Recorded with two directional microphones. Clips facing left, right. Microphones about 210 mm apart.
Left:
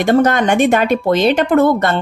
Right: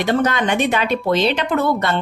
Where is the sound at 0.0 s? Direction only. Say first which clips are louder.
Left 5 dB; 45° left (ahead or behind).